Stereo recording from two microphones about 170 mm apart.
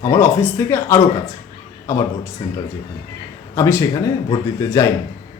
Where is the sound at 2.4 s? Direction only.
20° left (ahead or behind).